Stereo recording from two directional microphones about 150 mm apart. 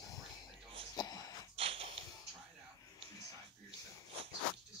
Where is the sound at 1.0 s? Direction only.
30° left (ahead or behind).